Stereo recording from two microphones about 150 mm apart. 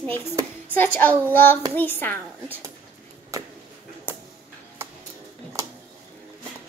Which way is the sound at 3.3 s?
20° right (ahead or behind).